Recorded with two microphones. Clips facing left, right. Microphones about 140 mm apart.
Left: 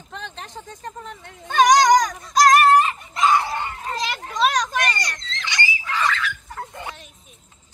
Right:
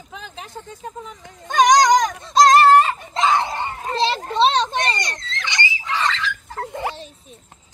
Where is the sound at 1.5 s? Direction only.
20° right (ahead or behind).